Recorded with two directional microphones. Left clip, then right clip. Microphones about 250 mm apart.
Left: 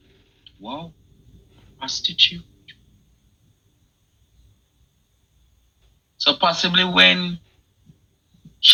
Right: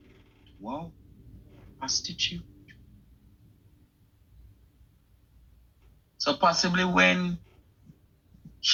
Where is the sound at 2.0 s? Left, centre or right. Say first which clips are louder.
Left 13 dB; centre.